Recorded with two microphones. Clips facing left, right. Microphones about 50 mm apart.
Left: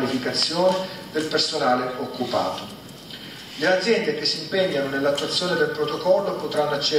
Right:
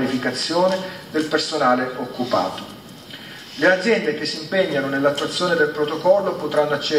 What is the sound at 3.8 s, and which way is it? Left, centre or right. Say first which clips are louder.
A man's voice: right 2 dB; right.